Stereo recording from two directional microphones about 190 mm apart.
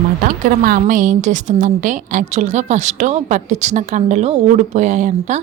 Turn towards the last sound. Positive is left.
turn(degrees=-40)  # may be behind; listen again after turning